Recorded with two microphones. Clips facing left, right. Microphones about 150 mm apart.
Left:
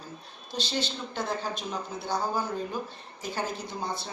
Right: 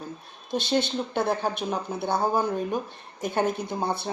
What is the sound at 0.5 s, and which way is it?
Speech, 55° right (ahead or behind).